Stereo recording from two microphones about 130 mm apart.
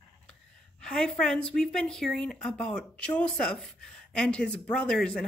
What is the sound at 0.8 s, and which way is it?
A woman's voice, 5° left (ahead or behind).